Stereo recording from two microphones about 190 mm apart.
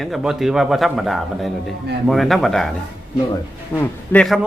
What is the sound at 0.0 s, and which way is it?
Speech, centre (ahead or behind).